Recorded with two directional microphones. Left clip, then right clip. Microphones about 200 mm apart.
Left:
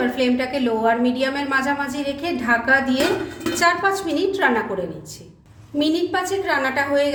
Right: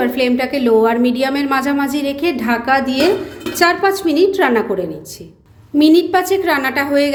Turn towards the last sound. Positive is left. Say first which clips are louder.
# right 4 dB
turn(degrees=-40)  # may be behind; listen again after turning